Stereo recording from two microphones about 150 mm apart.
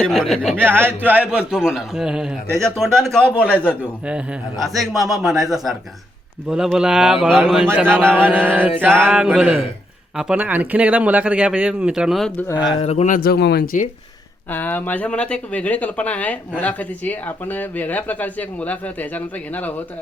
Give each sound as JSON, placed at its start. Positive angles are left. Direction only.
{"t": 0.0, "sound": "a man's voice", "side_deg": 0}
{"t": 0.5, "sound": "a man's voice", "side_deg": -15}
{"t": 4.0, "sound": "a man's voice", "side_deg": -5}
{"t": 7.6, "sound": "speech", "side_deg": -15}
{"t": 12.8, "sound": "a man's voice", "side_deg": 45}
{"t": 13.1, "sound": "speech", "side_deg": 85}
{"t": 14.5, "sound": "speech", "side_deg": 15}